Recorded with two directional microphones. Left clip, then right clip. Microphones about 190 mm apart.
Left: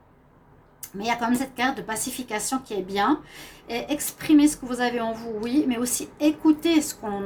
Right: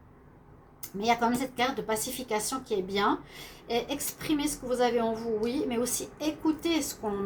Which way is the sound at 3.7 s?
55° left (ahead or behind).